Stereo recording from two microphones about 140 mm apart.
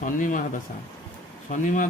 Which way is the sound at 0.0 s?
70° left (ahead or behind).